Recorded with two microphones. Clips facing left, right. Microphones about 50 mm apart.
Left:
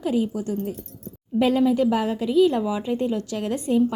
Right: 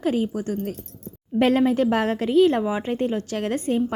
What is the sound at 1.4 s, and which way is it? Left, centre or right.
A woman's voice, right.